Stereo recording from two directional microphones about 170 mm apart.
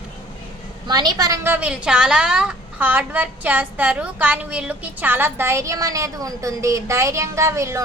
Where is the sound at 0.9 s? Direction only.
25° right (ahead or behind).